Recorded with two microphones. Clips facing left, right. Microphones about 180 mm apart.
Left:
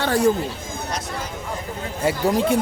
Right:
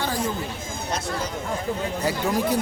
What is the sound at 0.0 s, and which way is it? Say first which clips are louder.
Speech: left 6 dB; 70° left (ahead or behind).